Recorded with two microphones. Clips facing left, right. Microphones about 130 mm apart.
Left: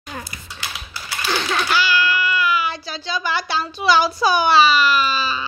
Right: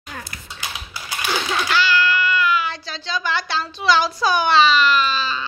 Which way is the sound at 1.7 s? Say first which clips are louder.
Right 1 dB; 10° left (ahead or behind).